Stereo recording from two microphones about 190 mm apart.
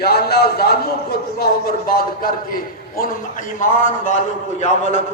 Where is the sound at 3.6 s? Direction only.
45° left (ahead or behind).